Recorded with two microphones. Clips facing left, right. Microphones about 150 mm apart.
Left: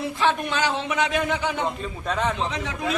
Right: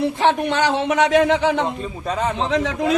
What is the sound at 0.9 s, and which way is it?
Speech, 75° right (ahead or behind).